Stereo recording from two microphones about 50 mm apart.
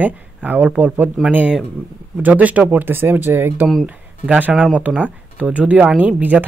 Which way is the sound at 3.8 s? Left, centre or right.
Right.